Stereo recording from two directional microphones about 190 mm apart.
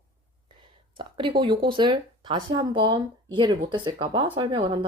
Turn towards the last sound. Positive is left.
turn(degrees=-25)  # may be behind; listen again after turning